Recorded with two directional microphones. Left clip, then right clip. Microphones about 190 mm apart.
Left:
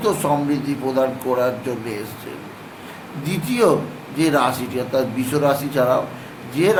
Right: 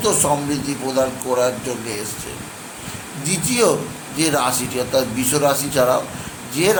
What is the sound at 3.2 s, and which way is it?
A man's voice, centre (ahead or behind).